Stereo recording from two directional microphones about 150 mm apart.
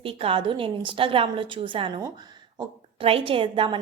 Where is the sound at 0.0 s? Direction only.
35° right (ahead or behind).